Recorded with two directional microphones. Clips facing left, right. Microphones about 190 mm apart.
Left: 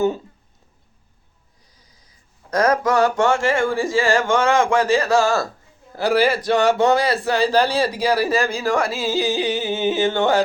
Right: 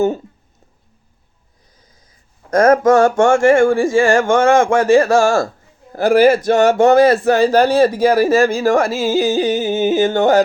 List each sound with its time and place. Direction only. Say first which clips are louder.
2.5 s speech: right 7 dB; 50° right (ahead or behind)